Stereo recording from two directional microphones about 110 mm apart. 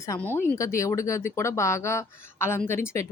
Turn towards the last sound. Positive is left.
turn(degrees=25)  # may be behind; listen again after turning